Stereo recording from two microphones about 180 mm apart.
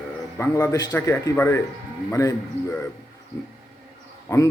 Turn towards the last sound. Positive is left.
turn(degrees=15)  # may be behind; listen again after turning